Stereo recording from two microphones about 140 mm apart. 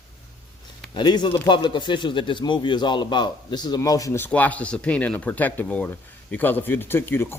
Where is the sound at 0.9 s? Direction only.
30° left (ahead or behind).